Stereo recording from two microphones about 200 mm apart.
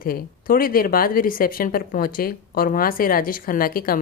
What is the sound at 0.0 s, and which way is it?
Speech, 45° left (ahead or behind).